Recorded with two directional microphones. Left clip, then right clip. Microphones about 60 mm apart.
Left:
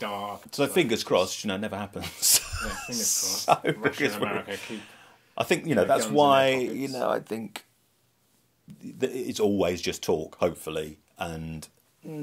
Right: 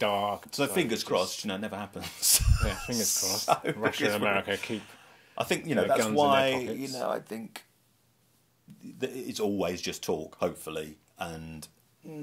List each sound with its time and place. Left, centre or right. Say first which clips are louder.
0.0 s speech: right 5 dB; right
0.5 s speech: left 4 dB; centre
4.1 s speech: right 3 dB; right
4.6 s speech: right 2 dB; left
8.8 s speech: left 6 dB; left